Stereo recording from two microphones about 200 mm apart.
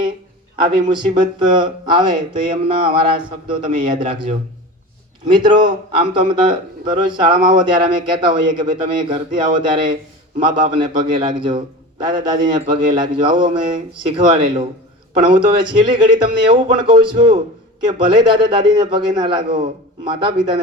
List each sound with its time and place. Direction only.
0.5 s a man's voice: 25° right (ahead or behind)
5.3 s a man's voice: 25° right (ahead or behind)